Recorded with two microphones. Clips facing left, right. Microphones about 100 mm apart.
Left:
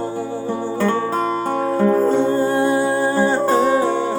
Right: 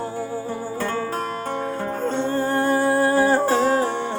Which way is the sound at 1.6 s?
40° left (ahead or behind).